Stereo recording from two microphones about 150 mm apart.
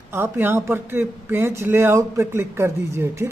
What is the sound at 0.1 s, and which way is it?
Speech, 15° right (ahead or behind).